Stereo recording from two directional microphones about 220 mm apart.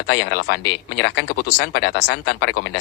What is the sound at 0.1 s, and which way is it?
Speech, 50° left (ahead or behind).